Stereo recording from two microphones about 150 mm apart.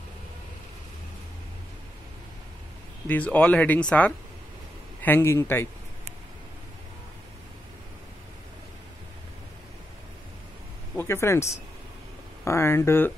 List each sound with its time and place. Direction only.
3.1 s speech: 10° left (ahead or behind)
11.0 s speech: 15° left (ahead or behind)
12.4 s speech: 15° left (ahead or behind)